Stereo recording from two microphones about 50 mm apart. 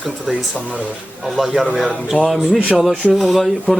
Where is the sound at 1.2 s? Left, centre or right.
Centre.